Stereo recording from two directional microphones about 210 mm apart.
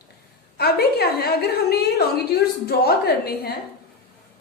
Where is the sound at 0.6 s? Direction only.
50° left (ahead or behind).